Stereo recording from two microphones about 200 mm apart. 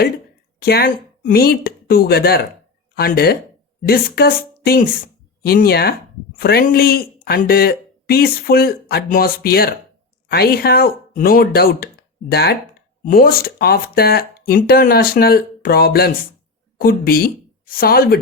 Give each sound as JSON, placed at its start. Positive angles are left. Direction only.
{"t": 0.6, "sound": "speech", "side_deg": 50}